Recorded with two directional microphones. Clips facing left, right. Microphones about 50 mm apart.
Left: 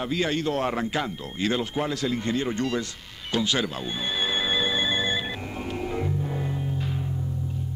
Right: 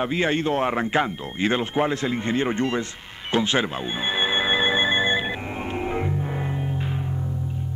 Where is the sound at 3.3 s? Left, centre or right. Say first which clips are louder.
Right 4 dB; right.